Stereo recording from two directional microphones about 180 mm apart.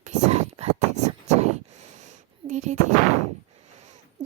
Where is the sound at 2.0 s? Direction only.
40° right (ahead or behind).